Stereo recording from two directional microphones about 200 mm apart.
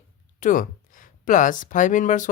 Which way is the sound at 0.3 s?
40° left (ahead or behind).